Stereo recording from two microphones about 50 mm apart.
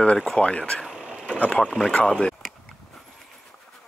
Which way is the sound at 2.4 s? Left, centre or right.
Centre.